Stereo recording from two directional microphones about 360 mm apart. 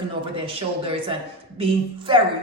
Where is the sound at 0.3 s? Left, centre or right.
Centre.